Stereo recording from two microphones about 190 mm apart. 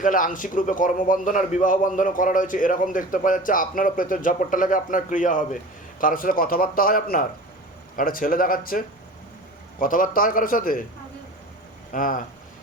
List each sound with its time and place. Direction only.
0.0 s a man's voice: 45° left (ahead or behind)
9.8 s a man's voice: 45° left (ahead or behind)
11.9 s a man's voice: 45° left (ahead or behind)